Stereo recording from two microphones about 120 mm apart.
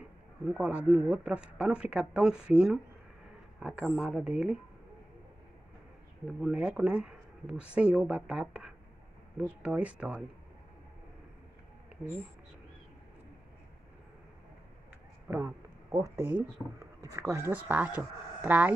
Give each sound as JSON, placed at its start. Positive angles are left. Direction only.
{"t": 0.5, "sound": "speech", "side_deg": -10}
{"t": 6.4, "sound": "speech", "side_deg": -5}
{"t": 15.2, "sound": "a sound", "side_deg": -20}
{"t": 16.8, "sound": "speech", "side_deg": -25}
{"t": 17.5, "sound": "speech", "side_deg": -15}